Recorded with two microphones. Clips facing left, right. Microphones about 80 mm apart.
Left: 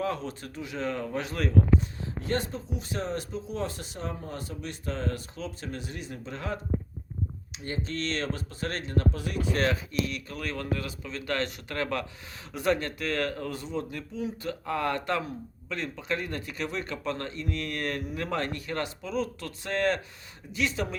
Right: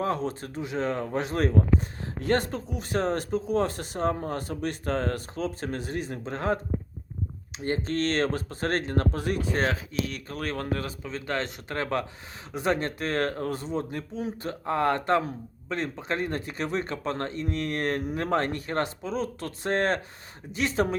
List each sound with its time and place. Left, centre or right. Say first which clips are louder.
0.0 s speech: right 3 dB; right
2.2 s speech: right 5 dB; right
7.6 s speech: right 6 dB; right